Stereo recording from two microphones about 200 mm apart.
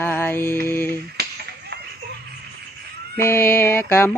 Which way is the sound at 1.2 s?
55° right (ahead or behind).